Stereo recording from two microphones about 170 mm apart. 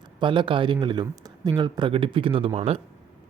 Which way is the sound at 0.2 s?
30° right (ahead or behind).